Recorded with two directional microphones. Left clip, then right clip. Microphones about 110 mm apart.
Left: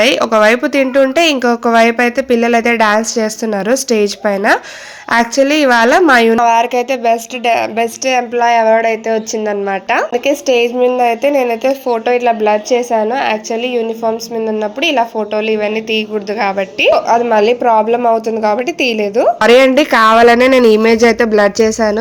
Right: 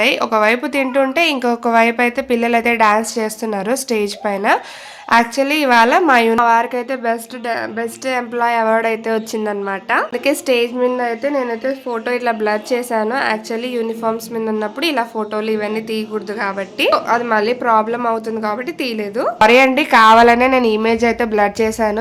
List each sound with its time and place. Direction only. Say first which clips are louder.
0.0 s a woman's voice: left 5 dB; 40° left (ahead or behind)
6.3 s a woman's voice: left 3 dB; 5° right (ahead or behind)
8.4 s speech: left 5 dB; 5° right (ahead or behind)
9.6 s a woman's voice: left 2 dB; 20° left (ahead or behind)
10.2 s a woman's voice: left 4 dB; 10° left (ahead or behind)
11.9 s a woman's voice: left 6 dB; 15° left (ahead or behind)
18.4 s a woman's voice: left 8 dB; 35° left (ahead or behind)
20.4 s speech: left 6 dB; 50° left (ahead or behind)